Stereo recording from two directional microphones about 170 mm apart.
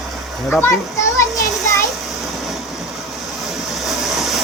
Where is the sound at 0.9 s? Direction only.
15° left (ahead or behind).